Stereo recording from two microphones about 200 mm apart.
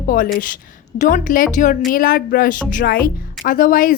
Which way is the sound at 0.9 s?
40° left (ahead or behind).